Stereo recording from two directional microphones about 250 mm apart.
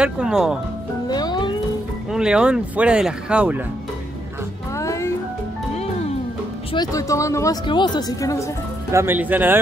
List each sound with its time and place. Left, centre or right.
0.0 s speech: centre
1.0 s music: centre
2.1 s speech: centre
4.7 s music: centre
6.7 s speech: centre
8.9 s speech: centre